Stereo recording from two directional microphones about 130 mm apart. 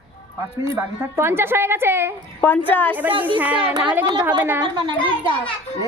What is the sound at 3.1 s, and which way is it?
Speech, 40° right (ahead or behind).